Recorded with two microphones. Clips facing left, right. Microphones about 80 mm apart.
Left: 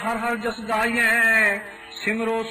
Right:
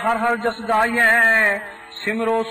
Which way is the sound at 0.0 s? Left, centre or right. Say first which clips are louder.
Right 6 dB; right.